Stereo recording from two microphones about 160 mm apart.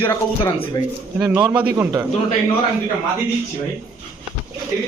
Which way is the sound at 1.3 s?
10° right (ahead or behind).